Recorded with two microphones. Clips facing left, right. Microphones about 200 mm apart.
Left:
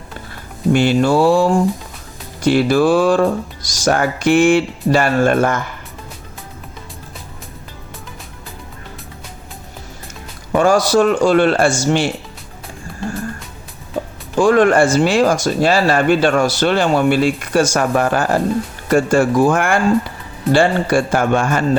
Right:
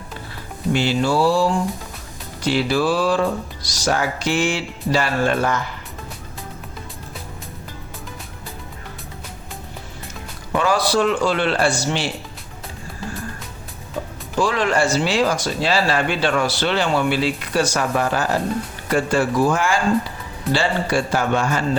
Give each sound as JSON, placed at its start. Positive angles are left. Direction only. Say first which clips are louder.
{"t": 0.7, "sound": "speech", "louder": "left 6 dB", "side_deg": 55}
{"t": 10.5, "sound": "speech", "louder": "left 6 dB", "side_deg": 45}
{"t": 14.3, "sound": "speech", "louder": "left 8 dB", "side_deg": 50}